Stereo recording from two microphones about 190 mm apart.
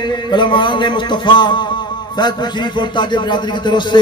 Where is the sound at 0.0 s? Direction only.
25° left (ahead or behind).